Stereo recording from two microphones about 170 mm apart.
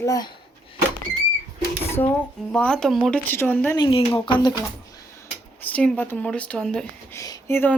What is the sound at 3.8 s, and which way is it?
Speech, 30° left (ahead or behind).